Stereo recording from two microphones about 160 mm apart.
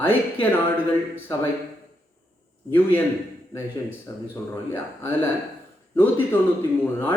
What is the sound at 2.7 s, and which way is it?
Speech, 10° left (ahead or behind).